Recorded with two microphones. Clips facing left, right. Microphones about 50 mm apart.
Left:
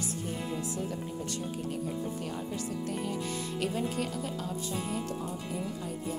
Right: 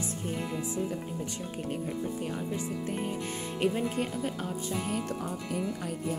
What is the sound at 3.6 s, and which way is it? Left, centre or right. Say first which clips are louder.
Music: right 4 dB; right.